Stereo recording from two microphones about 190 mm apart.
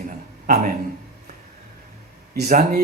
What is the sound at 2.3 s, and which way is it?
Speech, 45° right (ahead or behind).